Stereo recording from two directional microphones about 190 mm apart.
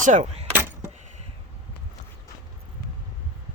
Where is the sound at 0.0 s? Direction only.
40° right (ahead or behind).